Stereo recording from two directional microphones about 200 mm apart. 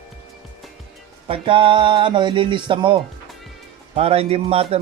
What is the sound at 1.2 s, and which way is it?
A man's voice, 25° right (ahead or behind).